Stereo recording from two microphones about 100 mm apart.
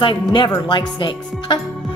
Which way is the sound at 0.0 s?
55° left (ahead or behind).